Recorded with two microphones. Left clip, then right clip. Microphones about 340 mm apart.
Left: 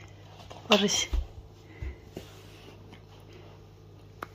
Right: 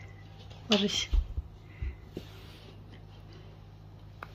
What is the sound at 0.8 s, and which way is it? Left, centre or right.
Speech, centre.